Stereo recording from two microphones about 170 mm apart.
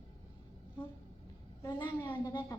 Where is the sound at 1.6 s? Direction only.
20° left (ahead or behind).